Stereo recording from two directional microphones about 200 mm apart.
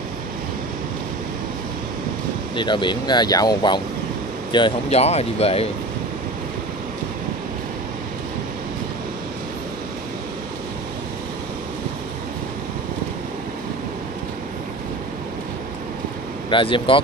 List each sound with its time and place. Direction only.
2.5 s speech: 25° left (ahead or behind)
16.4 s speech: 25° left (ahead or behind)